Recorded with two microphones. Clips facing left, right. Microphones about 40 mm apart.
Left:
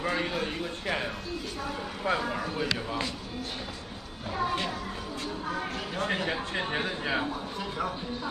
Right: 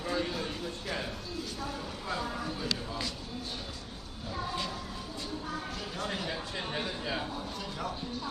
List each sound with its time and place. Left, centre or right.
0.0 s a man's voice: left
4.4 s music: left
5.6 s speech: left